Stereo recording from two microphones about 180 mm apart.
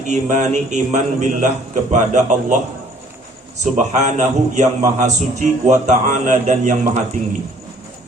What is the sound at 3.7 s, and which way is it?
A man's voice, 40° right (ahead or behind).